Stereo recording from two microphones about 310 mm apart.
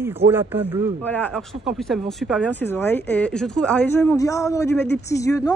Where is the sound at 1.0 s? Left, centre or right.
Centre.